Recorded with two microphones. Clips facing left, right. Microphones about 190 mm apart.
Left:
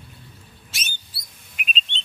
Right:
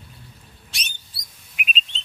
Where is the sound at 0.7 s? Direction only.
Centre (ahead or behind).